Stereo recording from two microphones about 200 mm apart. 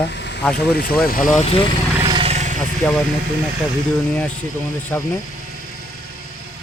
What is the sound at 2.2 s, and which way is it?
Vehicle, 35° right (ahead or behind).